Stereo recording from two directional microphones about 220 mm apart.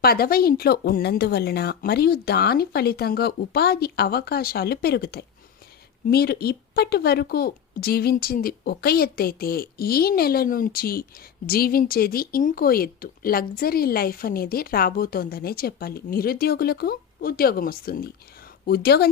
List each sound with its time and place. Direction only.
0.0 s speech: 45° left (ahead or behind)